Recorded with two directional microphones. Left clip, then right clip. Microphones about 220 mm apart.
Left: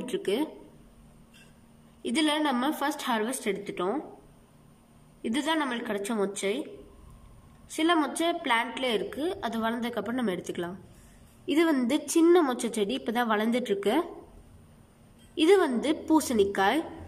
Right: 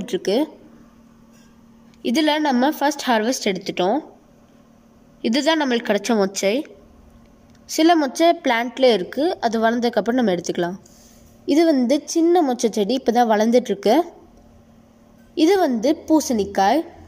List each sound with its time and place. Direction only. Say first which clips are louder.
0.2 s a woman's voice: right 9 dB; 35° right (ahead or behind)
2.0 s a woman's voice: right 8 dB; 40° right (ahead or behind)
5.2 s a woman's voice: right 10 dB; 40° right (ahead or behind)
7.7 s a woman's voice: right 9 dB; 40° right (ahead or behind)
15.4 s a woman's voice: right 6 dB; 35° right (ahead or behind)